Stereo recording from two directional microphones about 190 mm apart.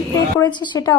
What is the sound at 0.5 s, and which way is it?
Speech, 20° left (ahead or behind).